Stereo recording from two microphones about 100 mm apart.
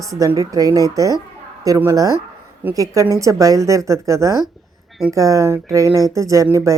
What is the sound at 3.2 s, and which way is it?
Speech, 35° right (ahead or behind).